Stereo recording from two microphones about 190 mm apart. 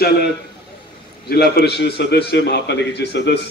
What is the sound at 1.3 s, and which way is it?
A man's voice, 55° left (ahead or behind).